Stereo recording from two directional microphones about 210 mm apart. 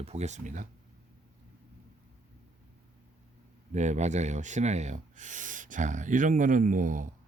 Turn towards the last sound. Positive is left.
turn(degrees=-40)  # may be behind; listen again after turning